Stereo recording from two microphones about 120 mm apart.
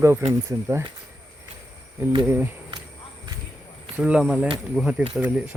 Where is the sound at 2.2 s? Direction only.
15° right (ahead or behind).